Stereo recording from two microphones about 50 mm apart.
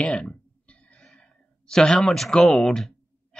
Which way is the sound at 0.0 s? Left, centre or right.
Left.